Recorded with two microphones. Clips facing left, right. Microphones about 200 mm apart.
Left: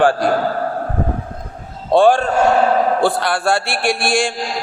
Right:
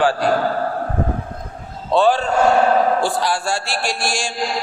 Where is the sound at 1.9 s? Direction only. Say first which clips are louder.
Left 4 dB; 50° left (ahead or behind).